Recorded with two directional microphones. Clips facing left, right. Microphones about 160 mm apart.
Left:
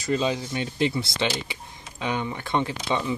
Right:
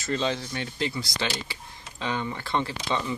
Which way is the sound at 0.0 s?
10° left (ahead or behind).